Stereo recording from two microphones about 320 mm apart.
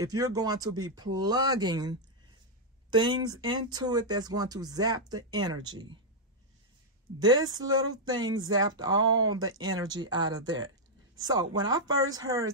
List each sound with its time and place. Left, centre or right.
0.0 s speech: centre
7.2 s speech: centre
11.9 s speech: right
12.2 s speech: centre